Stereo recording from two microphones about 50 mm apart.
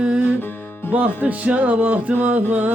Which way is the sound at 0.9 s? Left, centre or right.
Right.